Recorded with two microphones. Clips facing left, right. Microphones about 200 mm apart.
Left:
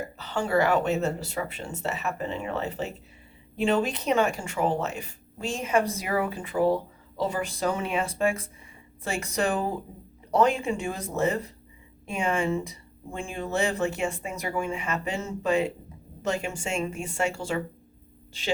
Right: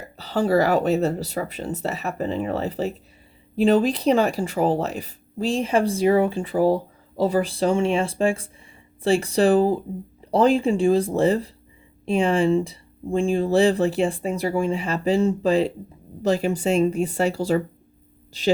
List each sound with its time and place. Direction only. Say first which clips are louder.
0.2 s speech: right 6 dB; 35° right (ahead or behind)